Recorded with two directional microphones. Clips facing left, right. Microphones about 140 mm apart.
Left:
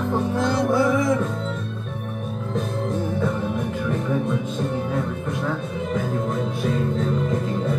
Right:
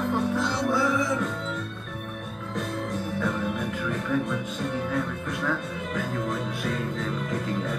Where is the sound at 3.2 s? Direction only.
25° left (ahead or behind).